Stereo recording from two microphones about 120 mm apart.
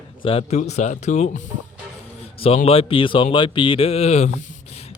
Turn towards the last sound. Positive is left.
turn(degrees=65)  # may be behind; listen again after turning